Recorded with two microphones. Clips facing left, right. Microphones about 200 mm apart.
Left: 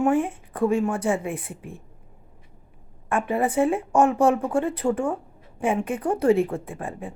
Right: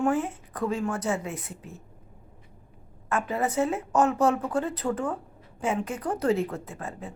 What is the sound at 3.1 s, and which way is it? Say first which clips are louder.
Speech: left 4 dB; 30° left (ahead or behind).